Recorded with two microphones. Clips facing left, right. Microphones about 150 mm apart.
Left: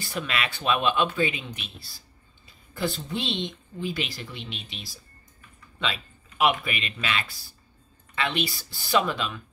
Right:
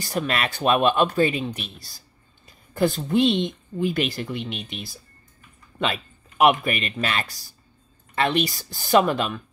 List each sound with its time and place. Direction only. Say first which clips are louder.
0.0 s speech: right 5 dB; 45° right (ahead or behind)